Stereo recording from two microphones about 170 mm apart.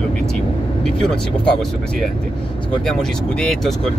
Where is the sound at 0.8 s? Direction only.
5° left (ahead or behind).